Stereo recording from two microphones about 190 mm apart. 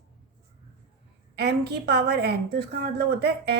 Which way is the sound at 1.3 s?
60° right (ahead or behind).